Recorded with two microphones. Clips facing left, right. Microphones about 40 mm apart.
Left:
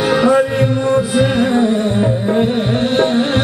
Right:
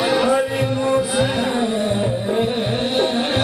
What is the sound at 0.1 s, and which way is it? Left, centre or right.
Music, centre.